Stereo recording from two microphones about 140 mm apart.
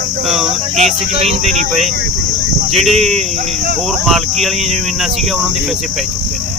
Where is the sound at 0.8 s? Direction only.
55° right (ahead or behind).